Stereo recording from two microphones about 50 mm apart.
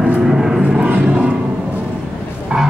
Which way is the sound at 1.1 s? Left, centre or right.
Right.